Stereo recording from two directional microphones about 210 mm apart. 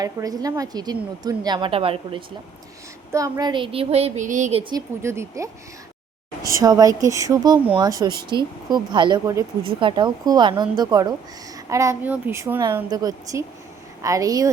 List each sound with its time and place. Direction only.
0.0 s a woman's voice: 15° right (ahead or behind)
3.1 s a woman's voice: 15° right (ahead or behind); by 4.6 s 35° right (ahead or behind)
4.7 s a woman's voice: 15° right (ahead or behind)